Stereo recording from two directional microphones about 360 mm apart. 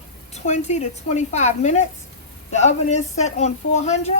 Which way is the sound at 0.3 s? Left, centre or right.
Centre.